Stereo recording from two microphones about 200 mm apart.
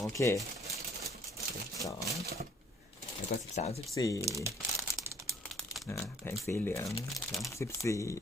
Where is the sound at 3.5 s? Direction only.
30° left (ahead or behind).